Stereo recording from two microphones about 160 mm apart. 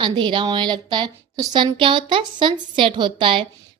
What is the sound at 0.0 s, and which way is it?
A woman's voice, 30° right (ahead or behind).